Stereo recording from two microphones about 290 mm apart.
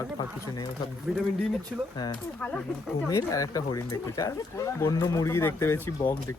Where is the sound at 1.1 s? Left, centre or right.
Centre.